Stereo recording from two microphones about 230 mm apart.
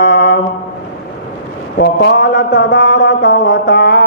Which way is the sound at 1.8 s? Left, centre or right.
Left.